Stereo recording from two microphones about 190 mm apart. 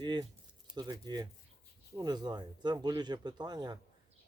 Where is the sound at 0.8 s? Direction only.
20° right (ahead or behind).